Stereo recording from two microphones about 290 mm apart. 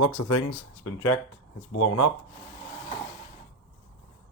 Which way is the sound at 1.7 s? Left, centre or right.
Left.